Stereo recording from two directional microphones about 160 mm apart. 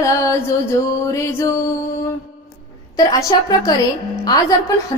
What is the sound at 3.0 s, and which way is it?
A woman's voice, 25° left (ahead or behind).